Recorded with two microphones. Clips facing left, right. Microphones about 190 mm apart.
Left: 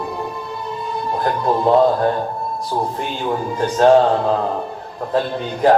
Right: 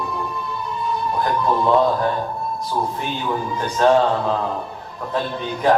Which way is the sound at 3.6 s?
35° left (ahead or behind).